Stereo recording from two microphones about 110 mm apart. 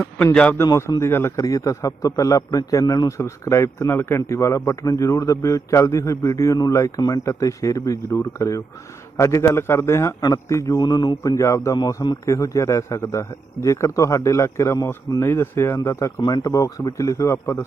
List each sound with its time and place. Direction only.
0.5 s a man's voice: 25° left (ahead or behind)
1.4 s a man's voice: 35° left (ahead or behind)
11.2 s a man's voice: 30° left (ahead or behind)